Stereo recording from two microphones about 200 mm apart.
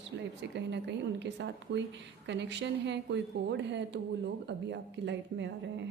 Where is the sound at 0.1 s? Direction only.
60° right (ahead or behind).